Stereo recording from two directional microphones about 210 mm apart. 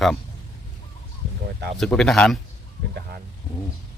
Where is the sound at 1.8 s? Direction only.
Centre (ahead or behind).